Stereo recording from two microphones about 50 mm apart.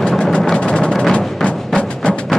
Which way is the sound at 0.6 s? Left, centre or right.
Centre.